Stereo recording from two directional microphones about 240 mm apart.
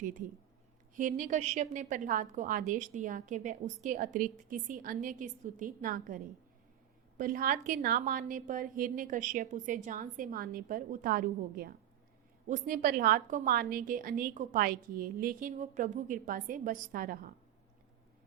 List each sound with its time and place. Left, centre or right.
0.9 s a woman's voice: right